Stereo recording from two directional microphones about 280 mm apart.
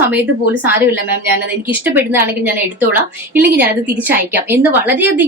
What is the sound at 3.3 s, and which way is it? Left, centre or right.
A woman's voice, centre.